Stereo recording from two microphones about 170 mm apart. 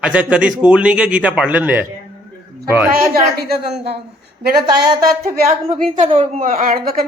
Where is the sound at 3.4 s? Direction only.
70° right (ahead or behind).